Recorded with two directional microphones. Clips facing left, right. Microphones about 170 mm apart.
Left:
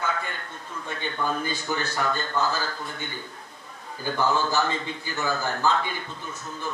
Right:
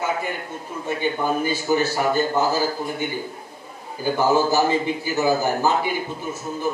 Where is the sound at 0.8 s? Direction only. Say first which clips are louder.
Right 6 dB; 15° right (ahead or behind).